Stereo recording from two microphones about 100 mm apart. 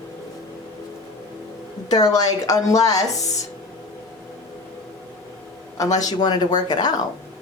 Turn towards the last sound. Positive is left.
turn(degrees=45)  # may be behind; listen again after turning